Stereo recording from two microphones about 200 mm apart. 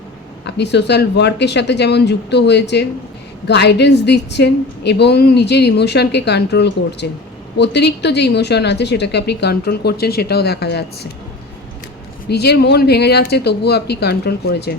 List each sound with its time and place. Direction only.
0.4 s a woman's voice: 60° left (ahead or behind)
12.3 s a woman's voice: 55° left (ahead or behind)